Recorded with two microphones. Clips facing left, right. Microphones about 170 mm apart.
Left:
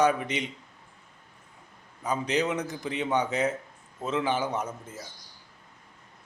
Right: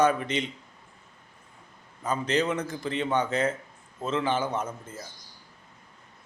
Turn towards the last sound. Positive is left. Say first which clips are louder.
# right 1 dB
turn(degrees=15)  # may be behind; listen again after turning